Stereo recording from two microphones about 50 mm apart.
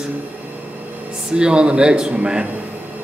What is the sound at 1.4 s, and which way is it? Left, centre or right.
Speech, centre.